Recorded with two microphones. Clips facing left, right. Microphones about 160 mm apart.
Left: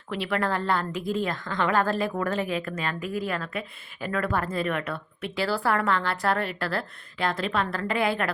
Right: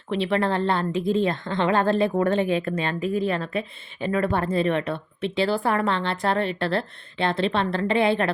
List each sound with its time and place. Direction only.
0.1 s a woman's voice: 25° right (ahead or behind)